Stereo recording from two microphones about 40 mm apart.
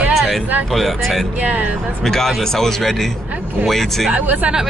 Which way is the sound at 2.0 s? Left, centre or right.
Centre.